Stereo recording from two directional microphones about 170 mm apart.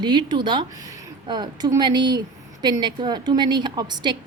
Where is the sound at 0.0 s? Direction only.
25° right (ahead or behind).